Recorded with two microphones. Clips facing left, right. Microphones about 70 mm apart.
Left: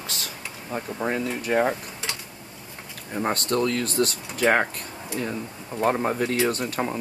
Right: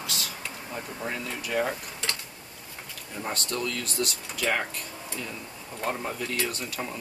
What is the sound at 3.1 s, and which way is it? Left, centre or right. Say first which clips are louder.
Speech: left 8 dB; left.